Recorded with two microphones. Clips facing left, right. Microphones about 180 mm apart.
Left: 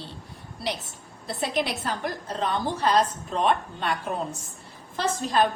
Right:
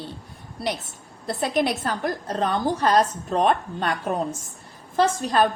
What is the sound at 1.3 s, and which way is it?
A woman's voice, 50° right (ahead or behind).